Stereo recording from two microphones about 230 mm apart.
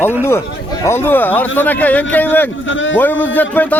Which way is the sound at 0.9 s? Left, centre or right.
Centre.